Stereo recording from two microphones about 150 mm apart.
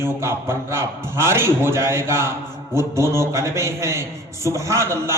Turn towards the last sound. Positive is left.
turn(degrees=-20)  # may be behind; listen again after turning